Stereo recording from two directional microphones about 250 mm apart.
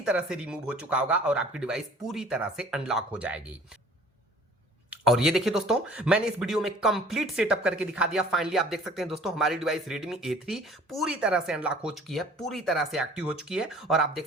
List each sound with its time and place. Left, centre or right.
0.0 s speech: centre
4.9 s speech: centre